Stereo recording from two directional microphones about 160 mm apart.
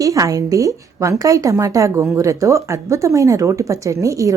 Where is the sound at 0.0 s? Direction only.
20° right (ahead or behind).